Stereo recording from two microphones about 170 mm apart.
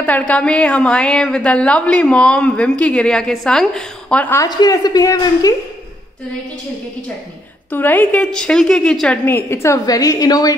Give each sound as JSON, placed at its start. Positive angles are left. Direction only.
{"t": 0.3, "sound": "a woman's voice", "side_deg": 5}
{"t": 4.5, "sound": "a woman's voice", "side_deg": 25}
{"t": 7.7, "sound": "a woman's voice", "side_deg": 10}